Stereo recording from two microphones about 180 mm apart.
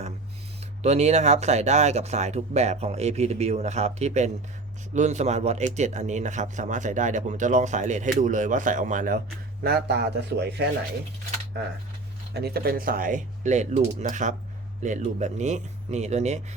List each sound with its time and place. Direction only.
0.8 s speech: 35° right (ahead or behind)
9.6 s speech: 65° right (ahead or behind)
12.3 s speech: 65° right (ahead or behind); by 16.4 s 40° right (ahead or behind)